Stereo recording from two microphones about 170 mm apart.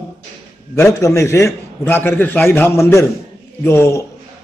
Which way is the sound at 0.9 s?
15° left (ahead or behind).